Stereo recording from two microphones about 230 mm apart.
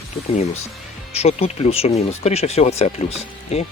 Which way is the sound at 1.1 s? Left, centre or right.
Left.